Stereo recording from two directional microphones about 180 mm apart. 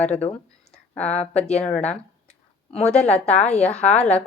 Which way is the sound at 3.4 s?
5° left (ahead or behind).